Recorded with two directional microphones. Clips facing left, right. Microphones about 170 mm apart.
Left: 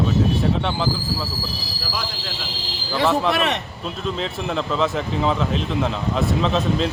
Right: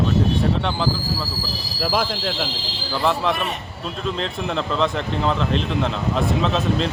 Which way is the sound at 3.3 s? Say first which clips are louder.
Left 5 dB; 80° left.